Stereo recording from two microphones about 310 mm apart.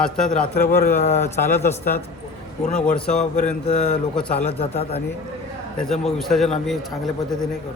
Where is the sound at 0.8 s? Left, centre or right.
Left.